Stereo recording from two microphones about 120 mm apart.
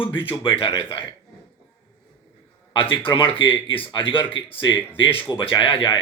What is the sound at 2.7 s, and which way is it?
Speech, 45° left (ahead or behind).